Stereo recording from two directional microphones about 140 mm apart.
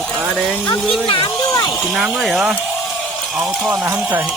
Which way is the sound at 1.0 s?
35° left (ahead or behind).